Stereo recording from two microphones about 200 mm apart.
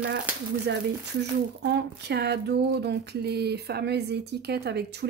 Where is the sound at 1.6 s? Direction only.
55° right (ahead or behind).